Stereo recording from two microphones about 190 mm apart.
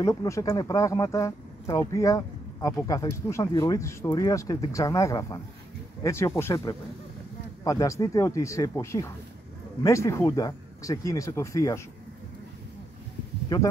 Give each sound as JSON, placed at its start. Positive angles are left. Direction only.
{"t": 0.0, "sound": "speech", "side_deg": 15}